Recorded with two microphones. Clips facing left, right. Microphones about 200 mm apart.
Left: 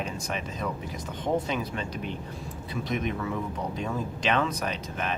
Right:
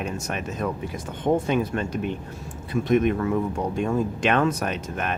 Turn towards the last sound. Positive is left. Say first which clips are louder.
# right 4 dB
turn(degrees=-55)  # may be behind; listen again after turning